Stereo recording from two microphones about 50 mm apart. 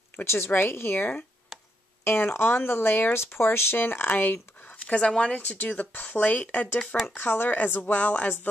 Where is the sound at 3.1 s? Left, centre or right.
Left.